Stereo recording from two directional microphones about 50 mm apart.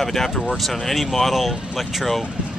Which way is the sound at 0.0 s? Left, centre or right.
Centre.